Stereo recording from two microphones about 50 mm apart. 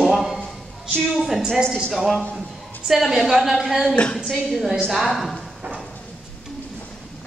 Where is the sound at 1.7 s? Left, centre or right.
Centre.